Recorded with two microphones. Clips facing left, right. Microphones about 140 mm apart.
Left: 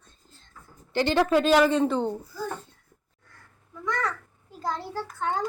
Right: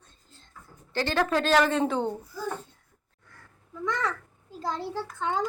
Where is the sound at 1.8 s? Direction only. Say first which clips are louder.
Left 2 dB; 5° right (ahead or behind).